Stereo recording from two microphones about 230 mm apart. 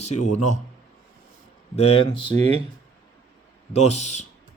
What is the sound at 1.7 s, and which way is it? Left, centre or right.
Speech, left.